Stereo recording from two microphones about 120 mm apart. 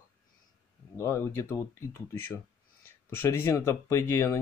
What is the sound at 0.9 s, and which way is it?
Speech, 20° left (ahead or behind).